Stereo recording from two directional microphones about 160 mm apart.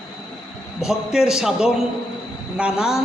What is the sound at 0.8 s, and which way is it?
A woman's voice, 5° right (ahead or behind).